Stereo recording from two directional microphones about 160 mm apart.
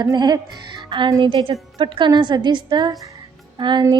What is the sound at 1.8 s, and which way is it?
Female singing, 30° right (ahead or behind).